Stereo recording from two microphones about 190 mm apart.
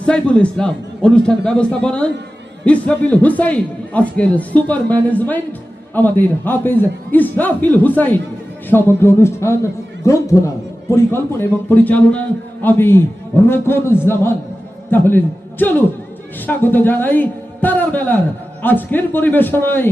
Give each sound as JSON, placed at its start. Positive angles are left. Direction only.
{"t": 0.0, "sound": "a man's voice", "side_deg": 5}